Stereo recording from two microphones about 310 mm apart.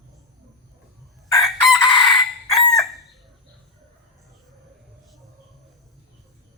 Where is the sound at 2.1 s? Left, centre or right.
Centre.